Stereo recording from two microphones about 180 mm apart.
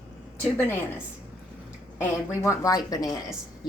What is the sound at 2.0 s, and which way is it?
Speech, 15° left (ahead or behind).